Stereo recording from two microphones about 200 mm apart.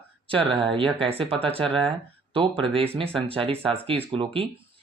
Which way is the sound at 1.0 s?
30° right (ahead or behind).